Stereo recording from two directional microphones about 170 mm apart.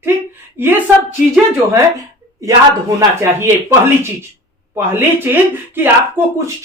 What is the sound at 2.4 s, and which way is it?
Speech, 20° right (ahead or behind).